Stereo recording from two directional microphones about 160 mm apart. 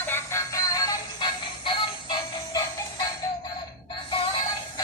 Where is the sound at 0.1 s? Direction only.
15° left (ahead or behind).